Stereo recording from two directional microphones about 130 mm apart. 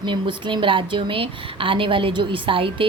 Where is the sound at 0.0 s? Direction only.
40° right (ahead or behind).